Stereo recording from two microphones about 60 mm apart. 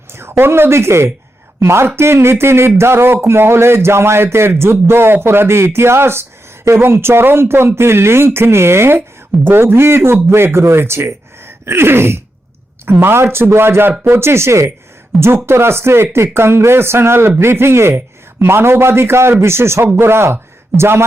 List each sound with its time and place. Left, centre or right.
0.1 s speech: right
15.1 s speech: centre
15.4 s a man's voice: right